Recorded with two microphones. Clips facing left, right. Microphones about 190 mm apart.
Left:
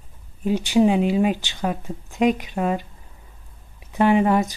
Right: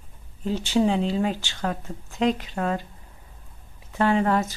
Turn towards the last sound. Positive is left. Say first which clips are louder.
# left 4 dB
turn(degrees=15)  # may be behind; listen again after turning